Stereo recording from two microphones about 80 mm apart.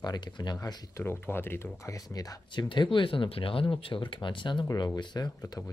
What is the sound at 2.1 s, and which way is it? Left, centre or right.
Speech, left.